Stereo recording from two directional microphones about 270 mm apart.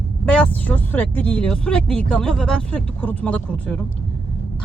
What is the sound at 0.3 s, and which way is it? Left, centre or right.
Speech, centre.